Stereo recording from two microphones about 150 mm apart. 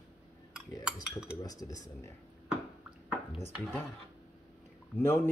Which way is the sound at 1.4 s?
25° left (ahead or behind).